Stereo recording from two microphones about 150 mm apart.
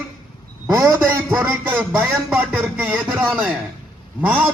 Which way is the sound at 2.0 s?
10° right (ahead or behind).